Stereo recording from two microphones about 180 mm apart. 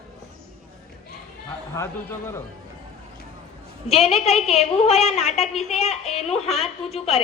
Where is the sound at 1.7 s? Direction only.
15° left (ahead or behind).